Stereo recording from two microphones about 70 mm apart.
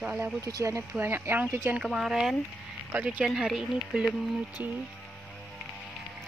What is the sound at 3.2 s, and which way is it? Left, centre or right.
Speech, centre.